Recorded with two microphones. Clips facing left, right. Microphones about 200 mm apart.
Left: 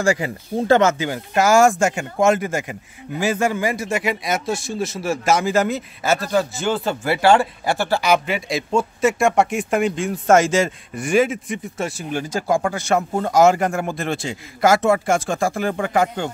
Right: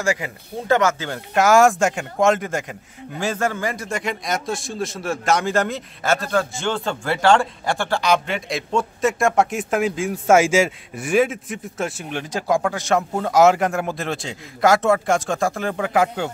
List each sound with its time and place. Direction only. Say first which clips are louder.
0.0 s speech: left 4 dB; 30° left (ahead or behind)
0.9 s speech: left 4 dB; 15° left (ahead or behind)
1.3 s a man's voice: even; centre (ahead or behind)